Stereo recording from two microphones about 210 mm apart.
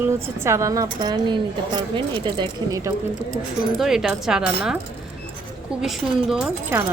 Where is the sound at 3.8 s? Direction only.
Centre (ahead or behind).